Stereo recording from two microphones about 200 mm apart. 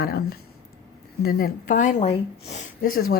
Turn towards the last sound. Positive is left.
turn(degrees=45)  # may be behind; listen again after turning